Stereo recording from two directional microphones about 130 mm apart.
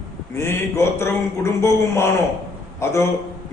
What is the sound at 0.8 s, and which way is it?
A man's voice, 20° left (ahead or behind).